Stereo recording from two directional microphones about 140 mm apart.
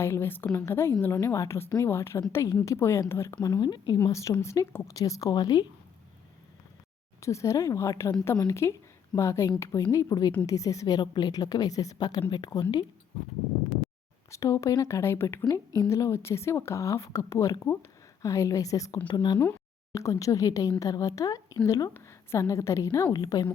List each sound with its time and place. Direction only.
0.0 s a woman's voice: 15° left (ahead or behind)
7.2 s a woman's voice: 20° left (ahead or behind)
14.3 s a woman's voice: 20° left (ahead or behind)
19.4 s a woman's voice: 20° left (ahead or behind)